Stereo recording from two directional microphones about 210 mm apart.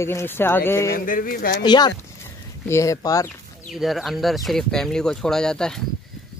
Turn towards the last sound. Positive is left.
turn(degrees=5)  # may be behind; listen again after turning